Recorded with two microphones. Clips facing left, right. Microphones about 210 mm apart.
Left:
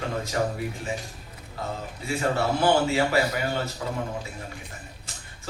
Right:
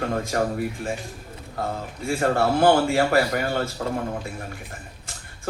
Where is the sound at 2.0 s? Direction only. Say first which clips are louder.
Right 4 dB; 50° right (ahead or behind).